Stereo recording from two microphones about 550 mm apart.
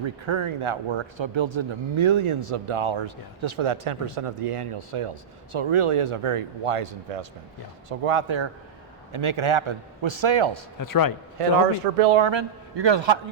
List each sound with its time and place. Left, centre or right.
0.0 s speech: right
10.8 s a man's voice: left
11.3 s speech: right